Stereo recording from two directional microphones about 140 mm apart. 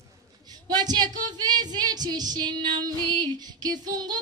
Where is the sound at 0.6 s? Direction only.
30° right (ahead or behind).